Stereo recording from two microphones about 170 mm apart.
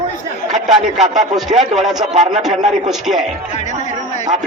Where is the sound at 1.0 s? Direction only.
45° right (ahead or behind).